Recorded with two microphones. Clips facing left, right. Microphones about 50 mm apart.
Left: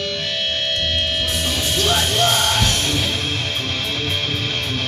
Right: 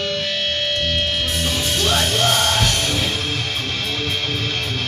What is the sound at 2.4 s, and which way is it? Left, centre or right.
Music, right.